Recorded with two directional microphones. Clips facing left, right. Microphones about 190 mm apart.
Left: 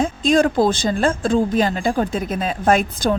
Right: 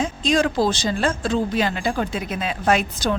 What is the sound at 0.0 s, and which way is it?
Speech, 50° left (ahead or behind).